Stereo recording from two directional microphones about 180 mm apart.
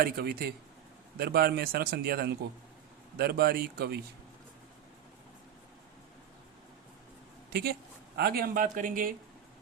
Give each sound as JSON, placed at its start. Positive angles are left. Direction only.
{"t": 0.0, "sound": "speech", "side_deg": -60}
{"t": 7.5, "sound": "speech", "side_deg": -60}